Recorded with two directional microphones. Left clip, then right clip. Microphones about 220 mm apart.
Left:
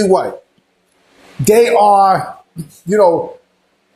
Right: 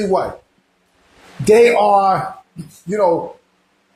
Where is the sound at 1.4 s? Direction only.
40° left (ahead or behind).